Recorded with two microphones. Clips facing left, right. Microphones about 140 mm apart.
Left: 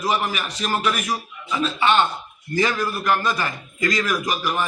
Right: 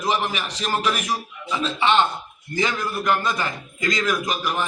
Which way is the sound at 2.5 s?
20° right (ahead or behind).